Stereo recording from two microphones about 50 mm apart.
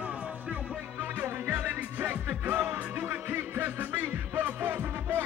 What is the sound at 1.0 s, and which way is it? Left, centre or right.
Music, right.